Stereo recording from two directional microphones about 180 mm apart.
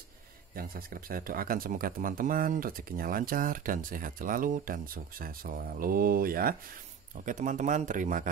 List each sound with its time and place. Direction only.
0.6 s speech: 55° right (ahead or behind)